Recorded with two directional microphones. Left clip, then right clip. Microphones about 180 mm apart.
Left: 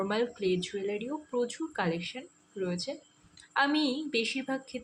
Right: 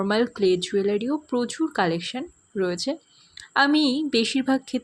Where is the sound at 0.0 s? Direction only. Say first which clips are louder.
Right 8 dB; 50° right (ahead or behind).